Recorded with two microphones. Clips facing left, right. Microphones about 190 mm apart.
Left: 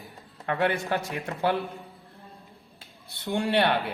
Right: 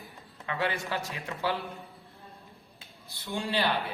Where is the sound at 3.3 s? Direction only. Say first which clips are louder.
Left 6 dB; 65° left (ahead or behind).